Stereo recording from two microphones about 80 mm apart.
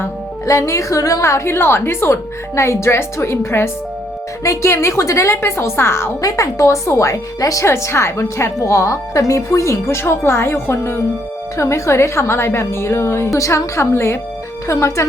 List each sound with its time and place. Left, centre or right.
0.4 s a woman's voice: left